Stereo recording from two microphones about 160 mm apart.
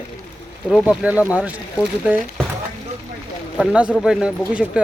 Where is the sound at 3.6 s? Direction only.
5° right (ahead or behind).